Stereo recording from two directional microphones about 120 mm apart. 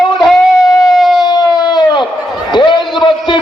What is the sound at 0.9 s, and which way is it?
Civil defense siren, centre (ahead or behind).